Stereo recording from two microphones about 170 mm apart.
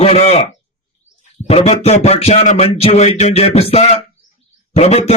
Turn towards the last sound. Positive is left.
turn(degrees=35)  # may be behind; listen again after turning